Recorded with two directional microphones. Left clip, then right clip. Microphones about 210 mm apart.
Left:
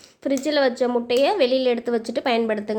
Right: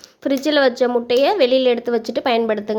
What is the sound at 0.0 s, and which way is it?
A woman's voice, 10° right (ahead or behind).